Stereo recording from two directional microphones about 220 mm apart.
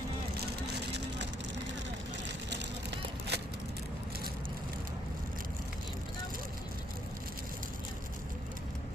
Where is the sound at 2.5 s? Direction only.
50° right (ahead or behind).